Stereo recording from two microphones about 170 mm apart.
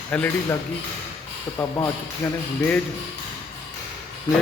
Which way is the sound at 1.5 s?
20° left (ahead or behind).